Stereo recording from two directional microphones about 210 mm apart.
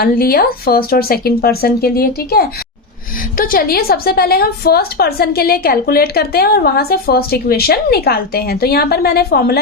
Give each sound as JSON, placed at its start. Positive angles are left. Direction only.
{"t": 0.0, "sound": "a woman's voice", "side_deg": 45}